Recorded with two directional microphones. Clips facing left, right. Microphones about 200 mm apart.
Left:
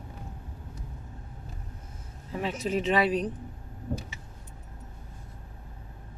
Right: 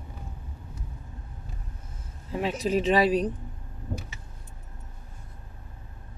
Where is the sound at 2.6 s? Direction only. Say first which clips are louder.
Right 3 dB; 40° right (ahead or behind).